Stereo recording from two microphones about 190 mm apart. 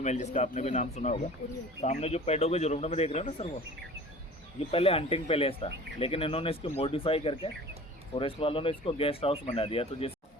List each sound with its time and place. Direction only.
0.0 s a man's voice: 40° left (ahead or behind)
4.7 s speech: 30° left (ahead or behind)